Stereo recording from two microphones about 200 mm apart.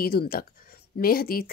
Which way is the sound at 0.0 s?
50° left (ahead or behind).